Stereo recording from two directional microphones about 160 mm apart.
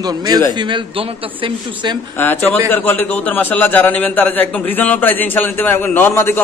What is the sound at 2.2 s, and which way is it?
A man's voice, 10° left (ahead or behind).